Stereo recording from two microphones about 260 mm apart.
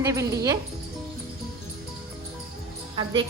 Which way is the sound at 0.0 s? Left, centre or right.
Centre.